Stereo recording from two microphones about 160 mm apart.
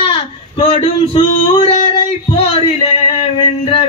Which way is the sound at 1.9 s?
35° left (ahead or behind).